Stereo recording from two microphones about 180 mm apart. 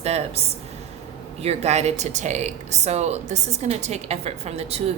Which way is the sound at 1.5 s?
35° right (ahead or behind).